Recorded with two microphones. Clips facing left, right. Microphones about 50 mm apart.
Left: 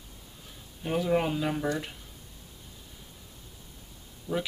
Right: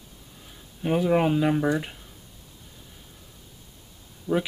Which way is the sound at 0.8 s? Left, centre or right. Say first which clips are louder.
Right 5 dB; centre.